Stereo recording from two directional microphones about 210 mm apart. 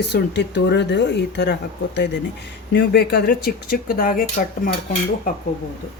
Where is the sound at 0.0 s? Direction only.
55° left (ahead or behind).